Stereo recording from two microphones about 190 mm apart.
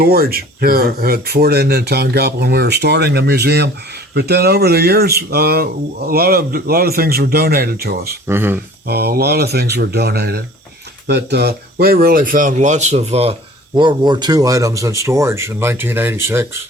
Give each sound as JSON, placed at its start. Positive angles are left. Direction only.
{"t": 0.0, "sound": "speech", "side_deg": -55}
{"t": 8.3, "sound": "speech", "side_deg": -10}
{"t": 8.9, "sound": "speech", "side_deg": -55}